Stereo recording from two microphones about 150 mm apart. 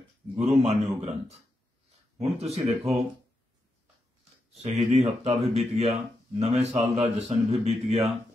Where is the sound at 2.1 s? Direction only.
45° right (ahead or behind).